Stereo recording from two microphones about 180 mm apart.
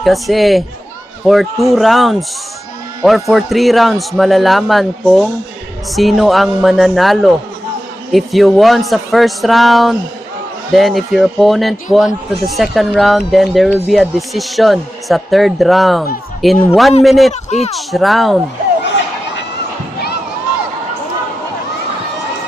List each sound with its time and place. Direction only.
0.0 s speech: centre (ahead or behind)
17.3 s speech: 40° left (ahead or behind)
17.7 s speech: centre (ahead or behind)